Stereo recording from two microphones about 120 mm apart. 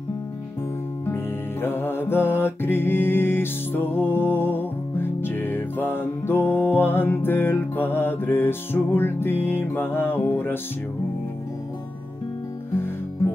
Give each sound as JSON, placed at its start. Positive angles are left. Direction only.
{"t": 1.0, "sound": "music", "side_deg": 20}